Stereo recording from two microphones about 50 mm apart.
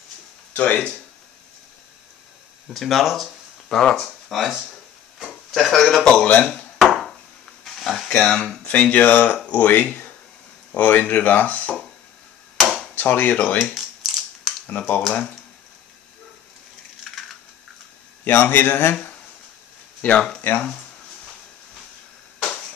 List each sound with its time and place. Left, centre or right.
0.5 s a sound: left
2.7 s speech: centre
6.8 s a sound: centre
8.1 s speech: centre
8.9 s speech: left
12.5 s chop: centre
12.9 s speech: left
13.6 s a sound: centre
14.7 s speech: left
17.0 s a sound: centre
18.2 s a man's voice: left
20.0 s speech: left